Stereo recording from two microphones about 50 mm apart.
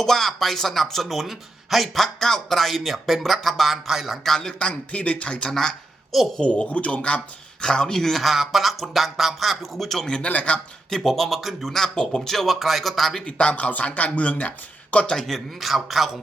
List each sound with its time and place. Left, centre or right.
0.0 s speech: centre
4.4 s a woman's voice: centre
6.4 s speech: left
7.6 s speech: centre
10.2 s speech: left
10.9 s a woman's voice: centre
13.2 s speech: left
15.1 s speech: centre